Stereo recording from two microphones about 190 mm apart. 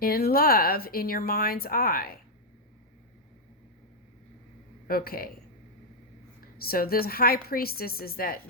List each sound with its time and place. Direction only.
0.0 s speech: 55° left (ahead or behind)
4.9 s speech: 50° left (ahead or behind)
6.4 s speech: 50° left (ahead or behind)